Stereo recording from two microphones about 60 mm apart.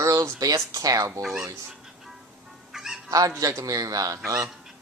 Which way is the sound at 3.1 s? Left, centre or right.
Right.